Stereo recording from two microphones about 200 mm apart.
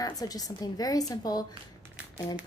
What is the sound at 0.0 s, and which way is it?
Speech, 20° left (ahead or behind).